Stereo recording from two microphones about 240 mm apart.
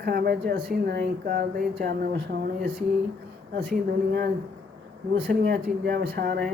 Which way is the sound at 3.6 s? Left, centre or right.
Right.